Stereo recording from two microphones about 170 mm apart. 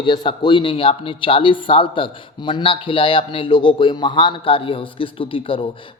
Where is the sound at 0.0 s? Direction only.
30° left (ahead or behind).